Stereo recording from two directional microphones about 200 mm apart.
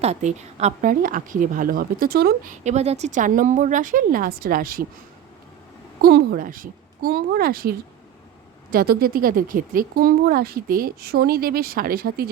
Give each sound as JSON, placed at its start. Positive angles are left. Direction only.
{"t": 0.0, "sound": "speech", "side_deg": -35}
{"t": 6.0, "sound": "speech", "side_deg": -50}